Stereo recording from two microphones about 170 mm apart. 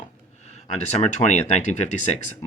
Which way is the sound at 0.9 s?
40° left (ahead or behind).